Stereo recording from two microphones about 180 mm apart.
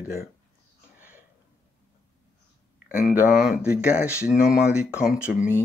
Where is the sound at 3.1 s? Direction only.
10° right (ahead or behind).